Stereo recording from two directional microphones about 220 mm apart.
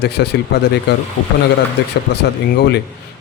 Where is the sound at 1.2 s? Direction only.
80° left.